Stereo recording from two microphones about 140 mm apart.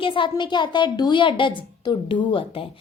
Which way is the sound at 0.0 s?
35° left (ahead or behind).